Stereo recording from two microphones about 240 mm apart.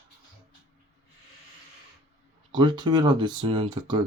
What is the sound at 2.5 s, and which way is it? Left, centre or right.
Speech, centre.